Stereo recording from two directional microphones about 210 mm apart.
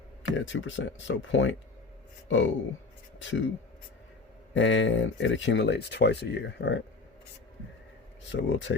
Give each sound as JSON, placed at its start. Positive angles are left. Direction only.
{"t": 0.3, "sound": "speech", "side_deg": 60}
{"t": 4.5, "sound": "speech", "side_deg": 60}
{"t": 8.3, "sound": "speech", "side_deg": 60}